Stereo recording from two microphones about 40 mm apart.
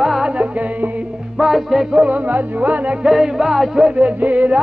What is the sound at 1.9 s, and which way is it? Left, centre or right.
Speech, right.